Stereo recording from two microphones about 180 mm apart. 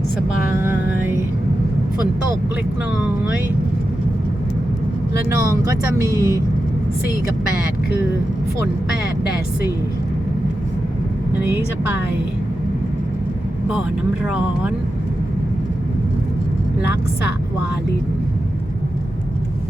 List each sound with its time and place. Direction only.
5.3 s speech: 15° right (ahead or behind)
6.1 s speech: 15° left (ahead or behind)
11.3 s speech: 10° right (ahead or behind)